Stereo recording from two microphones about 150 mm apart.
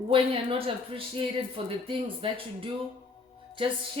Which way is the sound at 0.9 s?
35° right (ahead or behind).